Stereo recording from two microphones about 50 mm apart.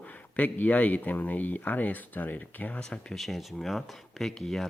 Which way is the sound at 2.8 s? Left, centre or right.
Centre.